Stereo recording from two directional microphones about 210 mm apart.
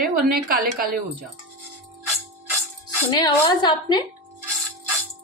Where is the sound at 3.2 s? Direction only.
20° left (ahead or behind).